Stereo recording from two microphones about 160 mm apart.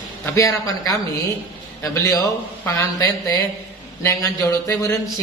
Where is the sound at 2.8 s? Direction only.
20° left (ahead or behind).